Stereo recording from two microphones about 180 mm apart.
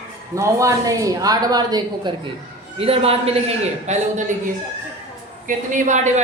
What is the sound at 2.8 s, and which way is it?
A woman's voice, 35° right (ahead or behind).